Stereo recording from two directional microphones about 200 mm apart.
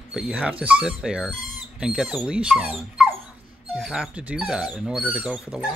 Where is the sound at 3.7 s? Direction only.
Centre (ahead or behind).